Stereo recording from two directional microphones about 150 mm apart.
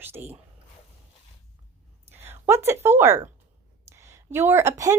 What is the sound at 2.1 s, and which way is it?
A woman's voice, 15° right (ahead or behind).